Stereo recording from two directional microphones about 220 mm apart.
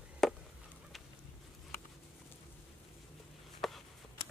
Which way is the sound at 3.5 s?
Centre (ahead or behind).